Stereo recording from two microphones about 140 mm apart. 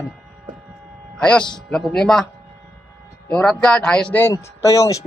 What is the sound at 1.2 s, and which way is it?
A man's voice, 5° left (ahead or behind).